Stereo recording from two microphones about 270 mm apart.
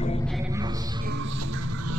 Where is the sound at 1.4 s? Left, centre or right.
Right.